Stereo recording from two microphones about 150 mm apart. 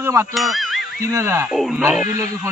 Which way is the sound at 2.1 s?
20° right (ahead or behind).